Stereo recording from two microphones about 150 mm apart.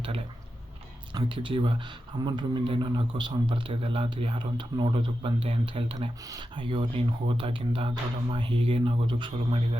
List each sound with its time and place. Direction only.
1.1 s a man's voice: 35° right (ahead or behind)